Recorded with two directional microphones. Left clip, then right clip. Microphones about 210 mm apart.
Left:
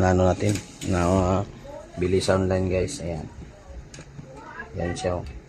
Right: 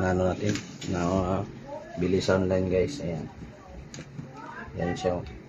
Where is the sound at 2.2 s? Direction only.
40° left (ahead or behind).